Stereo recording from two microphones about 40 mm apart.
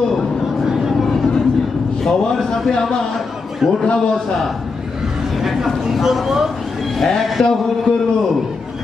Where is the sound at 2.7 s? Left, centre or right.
Centre.